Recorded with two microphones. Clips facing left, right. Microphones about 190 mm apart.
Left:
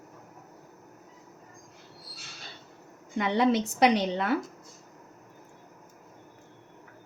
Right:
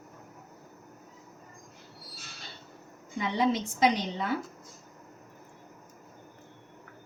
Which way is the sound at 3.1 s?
70° left (ahead or behind).